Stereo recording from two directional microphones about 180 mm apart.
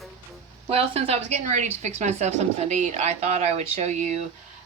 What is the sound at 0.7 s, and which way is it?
Speech, 35° right (ahead or behind).